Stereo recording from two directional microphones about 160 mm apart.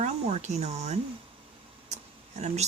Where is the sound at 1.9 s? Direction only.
45° right (ahead or behind).